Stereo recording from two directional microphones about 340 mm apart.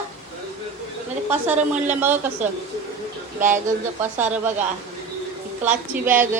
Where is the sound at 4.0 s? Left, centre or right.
Centre.